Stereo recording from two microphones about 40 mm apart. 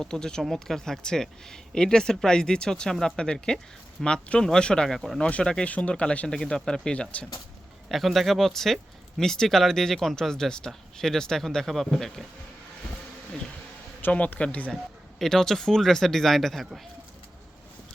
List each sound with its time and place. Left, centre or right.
0.0 s speech: centre
4.9 s speech: centre
5.4 s speech: centre
5.6 s speech: left
5.9 s speech: left
7.9 s speech: centre
14.3 s speech: left
15.2 s speech: centre